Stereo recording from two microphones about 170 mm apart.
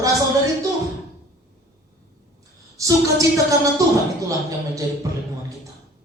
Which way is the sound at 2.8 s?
20° right (ahead or behind).